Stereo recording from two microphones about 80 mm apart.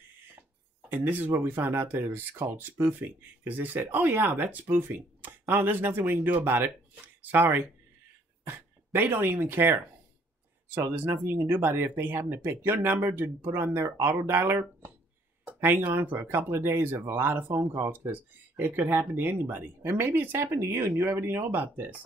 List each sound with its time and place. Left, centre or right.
0.8 s speech: right